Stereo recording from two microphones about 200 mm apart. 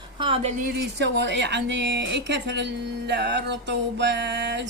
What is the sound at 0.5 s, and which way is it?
Speech, 50° right (ahead or behind).